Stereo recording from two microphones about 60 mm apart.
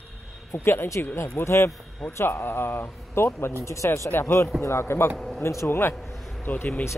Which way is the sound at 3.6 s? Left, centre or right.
Left.